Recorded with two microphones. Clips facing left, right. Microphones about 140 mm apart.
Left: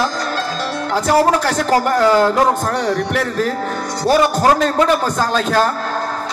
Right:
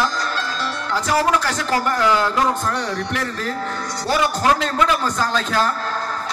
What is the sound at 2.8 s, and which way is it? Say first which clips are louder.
Speech: left 6 dB; 50° left (ahead or behind).